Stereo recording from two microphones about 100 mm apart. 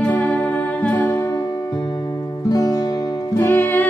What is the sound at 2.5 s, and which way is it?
Music, 40° left (ahead or behind).